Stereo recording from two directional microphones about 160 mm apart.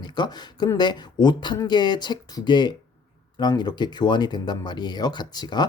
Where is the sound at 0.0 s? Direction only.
25° left (ahead or behind).